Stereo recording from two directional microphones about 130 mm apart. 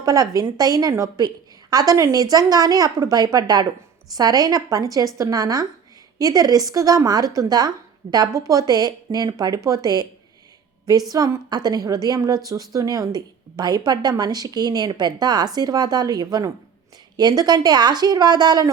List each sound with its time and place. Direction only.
0.0 s a woman's voice: 25° right (ahead or behind)
11.1 s a woman's voice: 30° right (ahead or behind)